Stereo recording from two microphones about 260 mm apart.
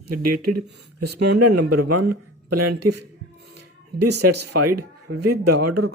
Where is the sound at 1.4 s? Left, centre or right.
Right.